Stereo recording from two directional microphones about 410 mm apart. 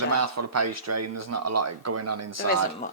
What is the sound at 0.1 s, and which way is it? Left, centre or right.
Speech, right.